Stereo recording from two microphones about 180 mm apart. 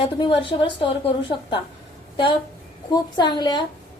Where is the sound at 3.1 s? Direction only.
25° left (ahead or behind).